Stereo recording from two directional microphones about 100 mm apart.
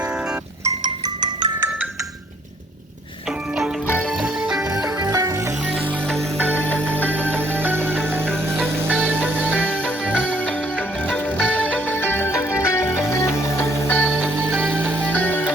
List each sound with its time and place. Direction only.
0.8 s music: 45° right (ahead or behind)
4.2 s music: 5° right (ahead or behind)
4.7 s music: 40° right (ahead or behind)
6.5 s music: 15° left (ahead or behind)
7.3 s music: 20° right (ahead or behind)
9.0 s music: 10° left (ahead or behind)
9.3 s music: 15° right (ahead or behind)
9.6 s music: 10° left (ahead or behind)
14.6 s music: 20° right (ahead or behind)
15.0 s music: 15° left (ahead or behind)